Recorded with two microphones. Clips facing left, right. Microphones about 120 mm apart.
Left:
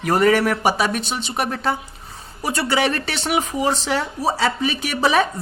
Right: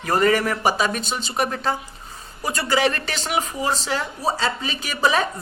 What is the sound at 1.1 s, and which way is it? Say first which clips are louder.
Speech: even; 60° left (ahead or behind).